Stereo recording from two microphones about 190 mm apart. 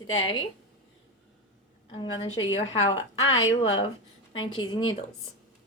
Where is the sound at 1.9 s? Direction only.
25° left (ahead or behind).